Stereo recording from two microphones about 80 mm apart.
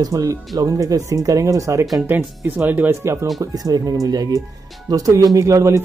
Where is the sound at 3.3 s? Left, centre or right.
Right.